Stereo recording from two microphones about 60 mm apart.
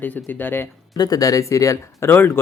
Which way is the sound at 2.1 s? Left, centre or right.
Left.